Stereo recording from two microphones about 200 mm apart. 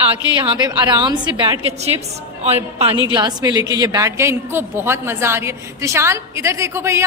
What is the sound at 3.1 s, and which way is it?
A woman's voice, 20° right (ahead or behind).